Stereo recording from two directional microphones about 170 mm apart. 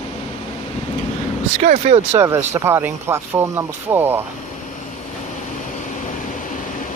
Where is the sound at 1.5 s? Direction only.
45° right (ahead or behind).